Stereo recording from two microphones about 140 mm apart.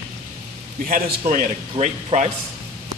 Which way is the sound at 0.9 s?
85° right.